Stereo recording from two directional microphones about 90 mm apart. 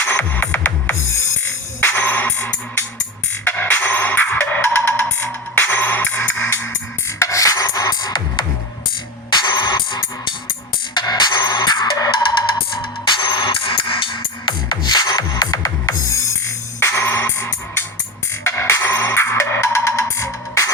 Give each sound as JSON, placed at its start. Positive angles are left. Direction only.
{"t": 0.0, "sound": "music", "side_deg": 20}
{"t": 7.2, "sound": "filing", "side_deg": 35}
{"t": 9.3, "sound": "music", "side_deg": 55}
{"t": 13.1, "sound": "music", "side_deg": 55}
{"t": 13.6, "sound": "music", "side_deg": 75}